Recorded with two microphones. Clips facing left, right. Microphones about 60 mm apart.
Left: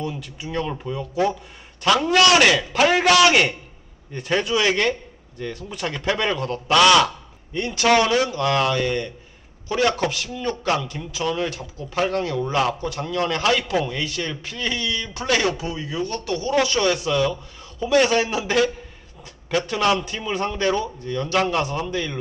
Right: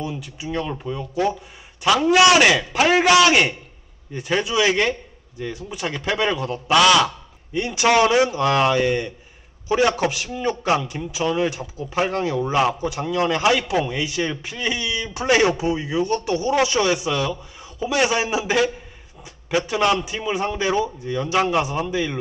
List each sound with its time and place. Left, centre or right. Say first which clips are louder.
0.0 s a man's voice: even; centre
19.2 s a sound: right 1 dB; centre
20.0 s a man's voice: right 1 dB; centre